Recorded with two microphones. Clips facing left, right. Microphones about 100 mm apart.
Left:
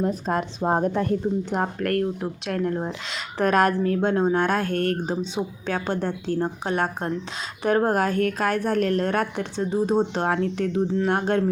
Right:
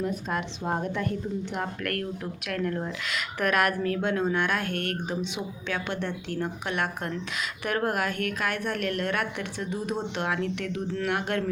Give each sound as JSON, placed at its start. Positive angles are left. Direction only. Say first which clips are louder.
{"t": 0.0, "sound": "speech", "louder": "left 5 dB", "side_deg": 35}